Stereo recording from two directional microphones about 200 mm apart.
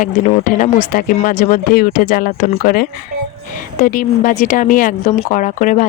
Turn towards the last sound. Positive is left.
turn(degrees=40)  # may be behind; listen again after turning